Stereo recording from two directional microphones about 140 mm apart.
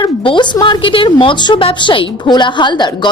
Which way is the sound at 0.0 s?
35° left (ahead or behind).